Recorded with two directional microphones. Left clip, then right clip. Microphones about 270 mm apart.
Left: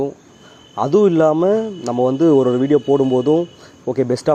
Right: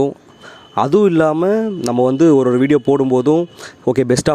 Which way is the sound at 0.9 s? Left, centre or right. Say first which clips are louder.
Left 1 dB; right.